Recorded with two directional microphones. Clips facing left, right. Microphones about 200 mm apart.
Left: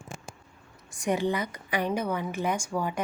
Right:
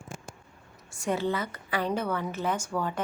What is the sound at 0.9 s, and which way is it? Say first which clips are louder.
A woman's voice: left 2 dB; 15° left (ahead or behind).